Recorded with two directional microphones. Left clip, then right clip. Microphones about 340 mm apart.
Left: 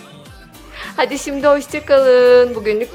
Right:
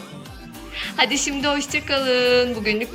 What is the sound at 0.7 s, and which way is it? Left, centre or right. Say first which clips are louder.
A woman's voice: left 2 dB; centre.